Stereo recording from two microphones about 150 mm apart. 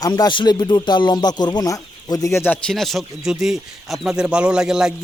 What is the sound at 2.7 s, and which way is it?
Speech, centre (ahead or behind).